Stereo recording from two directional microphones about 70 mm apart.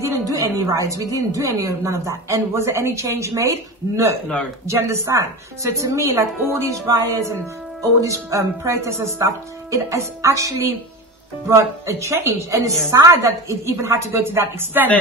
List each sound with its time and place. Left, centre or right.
0.3 s a woman's voice: right
6.4 s a woman's voice: right
6.7 s a woman's voice: right